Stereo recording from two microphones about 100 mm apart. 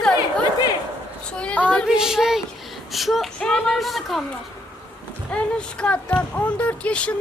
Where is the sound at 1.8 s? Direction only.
5° right (ahead or behind).